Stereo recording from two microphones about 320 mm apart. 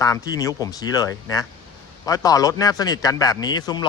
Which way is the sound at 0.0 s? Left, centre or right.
Centre.